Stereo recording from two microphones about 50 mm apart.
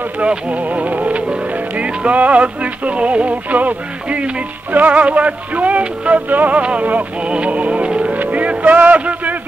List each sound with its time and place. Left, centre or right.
0.2 s speech: right
4.7 s music: right
9.0 s a sound: right